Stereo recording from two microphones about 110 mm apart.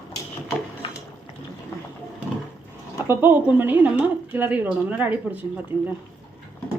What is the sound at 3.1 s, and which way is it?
A woman's voice, 20° right (ahead or behind).